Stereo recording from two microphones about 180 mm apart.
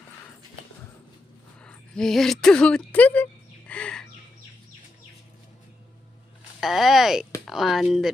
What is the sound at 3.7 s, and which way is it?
Bird, 5° left (ahead or behind).